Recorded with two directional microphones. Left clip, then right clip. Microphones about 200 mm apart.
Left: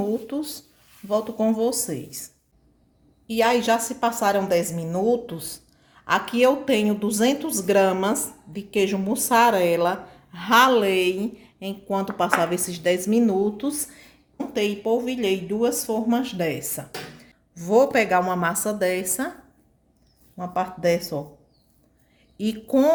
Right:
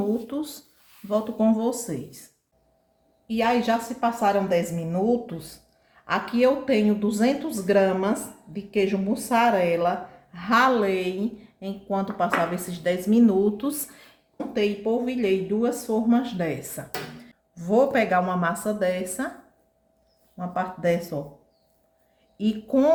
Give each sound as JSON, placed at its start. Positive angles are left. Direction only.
{"t": 0.0, "sound": "a sound", "side_deg": 25}
{"t": 1.0, "sound": "a woman's voice", "side_deg": 30}
{"t": 3.2, "sound": "a woman's voice", "side_deg": 40}
{"t": 14.3, "sound": "a woman's voice", "side_deg": 35}
{"t": 20.3, "sound": "a woman's voice", "side_deg": 30}
{"t": 22.4, "sound": "a woman's voice", "side_deg": 35}